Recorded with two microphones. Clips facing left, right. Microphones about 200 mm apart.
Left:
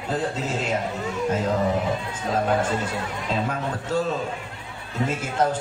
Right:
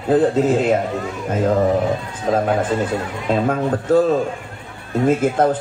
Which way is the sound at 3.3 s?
55° right (ahead or behind).